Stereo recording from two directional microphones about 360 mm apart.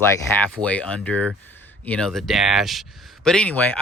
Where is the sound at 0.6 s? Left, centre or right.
Centre.